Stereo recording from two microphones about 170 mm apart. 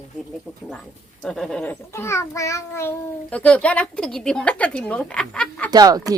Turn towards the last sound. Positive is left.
turn(degrees=-20)  # may be behind; listen again after turning